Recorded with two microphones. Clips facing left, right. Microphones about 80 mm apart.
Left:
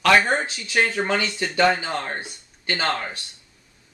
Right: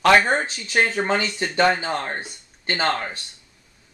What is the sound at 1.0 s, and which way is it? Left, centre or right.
Speech, right.